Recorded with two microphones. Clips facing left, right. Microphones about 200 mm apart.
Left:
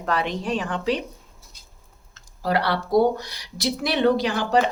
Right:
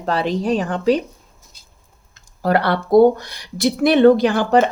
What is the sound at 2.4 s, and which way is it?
Speech, 55° right (ahead or behind).